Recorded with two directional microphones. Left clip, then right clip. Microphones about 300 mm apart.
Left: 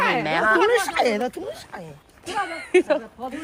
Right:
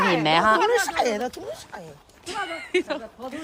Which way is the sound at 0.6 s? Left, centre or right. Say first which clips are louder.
Left 2 dB; left.